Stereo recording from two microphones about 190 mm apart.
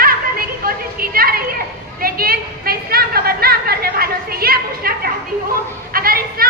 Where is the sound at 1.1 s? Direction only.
50° right (ahead or behind).